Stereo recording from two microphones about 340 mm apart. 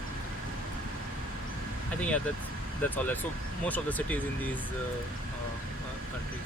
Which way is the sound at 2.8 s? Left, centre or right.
Centre.